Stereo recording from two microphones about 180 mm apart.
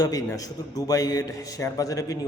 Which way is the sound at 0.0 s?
20° left (ahead or behind).